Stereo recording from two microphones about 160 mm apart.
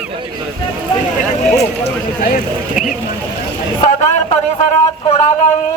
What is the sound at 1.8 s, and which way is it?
Speech, 65° left (ahead or behind).